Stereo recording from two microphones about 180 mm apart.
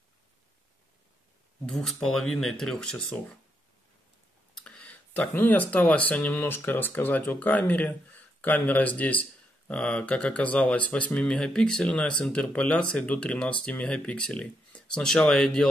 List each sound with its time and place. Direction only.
1.7 s speech: centre (ahead or behind)
4.6 s speech: 10° left (ahead or behind)